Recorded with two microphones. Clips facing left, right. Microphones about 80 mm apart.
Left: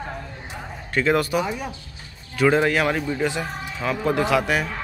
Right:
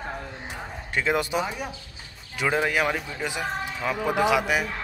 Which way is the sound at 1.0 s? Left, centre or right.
Centre.